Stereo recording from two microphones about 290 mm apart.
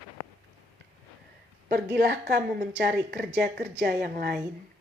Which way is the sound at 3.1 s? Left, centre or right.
Right.